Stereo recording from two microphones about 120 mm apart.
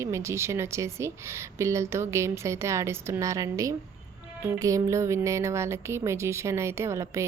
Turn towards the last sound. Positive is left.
turn(degrees=-25)  # may be behind; listen again after turning